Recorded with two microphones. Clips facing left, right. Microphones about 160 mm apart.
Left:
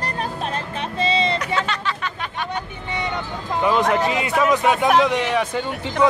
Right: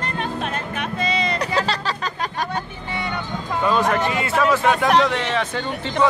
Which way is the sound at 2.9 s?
20° left (ahead or behind).